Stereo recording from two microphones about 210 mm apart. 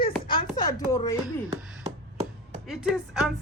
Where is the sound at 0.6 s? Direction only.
20° left (ahead or behind).